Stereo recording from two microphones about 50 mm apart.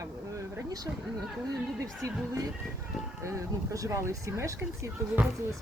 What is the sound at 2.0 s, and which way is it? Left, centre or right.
Speech, right.